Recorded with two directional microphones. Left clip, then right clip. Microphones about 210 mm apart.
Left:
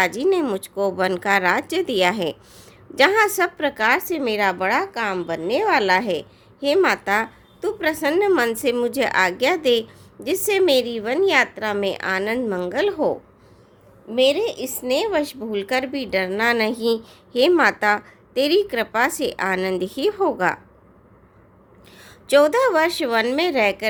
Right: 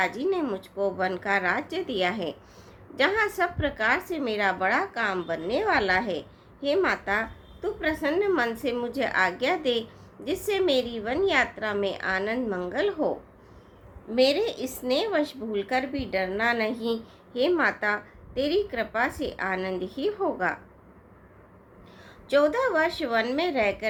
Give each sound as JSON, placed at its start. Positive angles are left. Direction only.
{"t": 0.0, "sound": "a woman's voice", "side_deg": 50}
{"t": 14.2, "sound": "a woman's voice", "side_deg": 30}
{"t": 21.9, "sound": "a woman's voice", "side_deg": 50}